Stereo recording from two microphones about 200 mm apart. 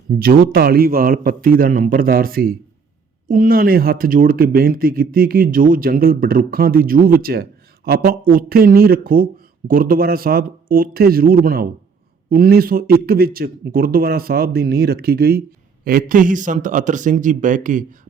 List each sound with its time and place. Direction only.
0.1 s speech: 50° right (ahead or behind)